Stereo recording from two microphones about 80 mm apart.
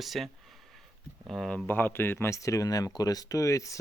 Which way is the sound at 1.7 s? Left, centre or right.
Left.